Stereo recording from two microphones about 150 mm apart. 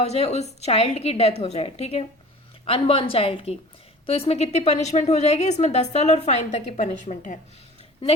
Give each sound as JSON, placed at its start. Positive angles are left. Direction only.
{"t": 0.0, "sound": "a woman's voice", "side_deg": 45}